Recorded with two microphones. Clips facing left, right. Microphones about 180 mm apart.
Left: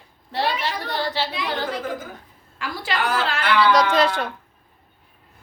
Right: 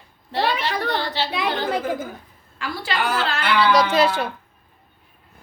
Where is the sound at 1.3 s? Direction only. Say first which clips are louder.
Right 3 dB; 60° right (ahead or behind).